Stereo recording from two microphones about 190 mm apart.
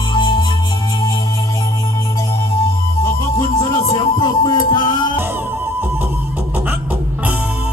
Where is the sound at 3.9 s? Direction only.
20° left (ahead or behind).